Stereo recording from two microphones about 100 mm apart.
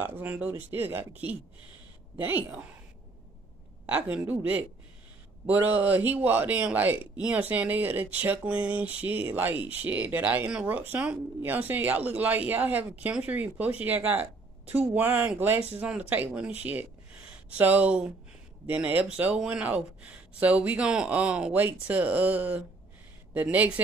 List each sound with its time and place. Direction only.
0.0 s speech: 15° right (ahead or behind)
2.1 s a man's voice: 20° right (ahead or behind)
3.8 s a man's voice: 15° right (ahead or behind)